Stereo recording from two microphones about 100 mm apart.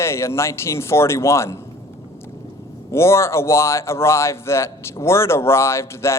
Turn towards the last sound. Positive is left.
turn(degrees=25)  # may be behind; listen again after turning